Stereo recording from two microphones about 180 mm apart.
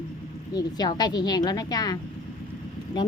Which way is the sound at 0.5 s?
20° left (ahead or behind).